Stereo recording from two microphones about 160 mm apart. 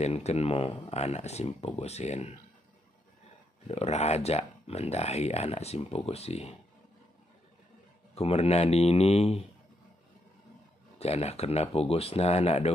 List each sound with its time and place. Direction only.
0.0 s speech: 40° left (ahead or behind)
3.6 s speech: 40° left (ahead or behind)
8.1 s speech: 40° left (ahead or behind)
11.0 s speech: 40° left (ahead or behind)